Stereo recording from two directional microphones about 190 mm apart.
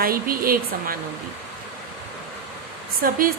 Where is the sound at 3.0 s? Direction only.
50° right (ahead or behind).